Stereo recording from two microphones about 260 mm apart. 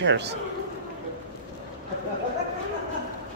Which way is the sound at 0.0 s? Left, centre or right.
Right.